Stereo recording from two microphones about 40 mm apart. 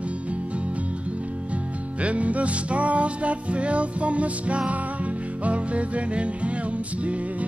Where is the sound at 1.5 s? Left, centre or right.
Right.